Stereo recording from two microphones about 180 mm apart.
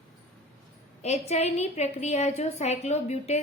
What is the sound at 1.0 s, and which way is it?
A woman's voice, 35° left (ahead or behind).